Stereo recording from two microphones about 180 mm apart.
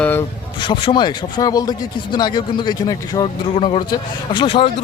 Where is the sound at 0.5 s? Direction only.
25° left (ahead or behind).